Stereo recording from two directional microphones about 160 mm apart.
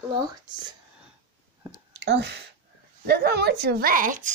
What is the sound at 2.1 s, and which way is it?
A woman's voice, 90° right.